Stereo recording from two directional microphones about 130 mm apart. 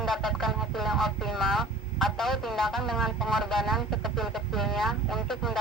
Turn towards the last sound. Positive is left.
turn(degrees=0)  # may be behind; listen again after turning